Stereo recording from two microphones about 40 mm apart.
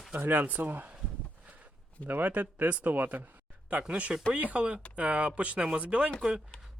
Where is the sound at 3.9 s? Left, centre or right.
Right.